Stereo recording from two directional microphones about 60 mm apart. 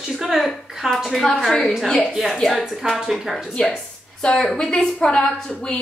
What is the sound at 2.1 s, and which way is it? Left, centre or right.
A woman's voice, centre.